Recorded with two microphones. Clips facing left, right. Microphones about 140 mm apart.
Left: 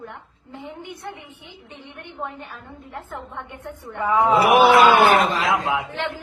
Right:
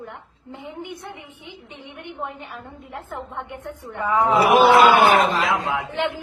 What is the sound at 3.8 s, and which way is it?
Speech, 15° left (ahead or behind).